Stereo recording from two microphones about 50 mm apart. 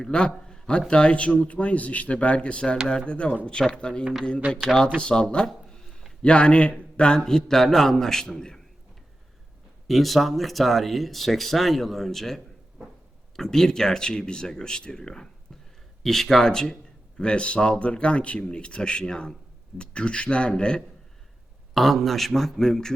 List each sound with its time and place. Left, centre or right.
0.0 s a man's voice: centre
9.8 s a man's voice: centre
21.8 s speech: centre